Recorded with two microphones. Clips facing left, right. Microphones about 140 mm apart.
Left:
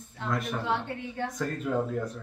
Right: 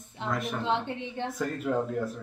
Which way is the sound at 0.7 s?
20° right (ahead or behind).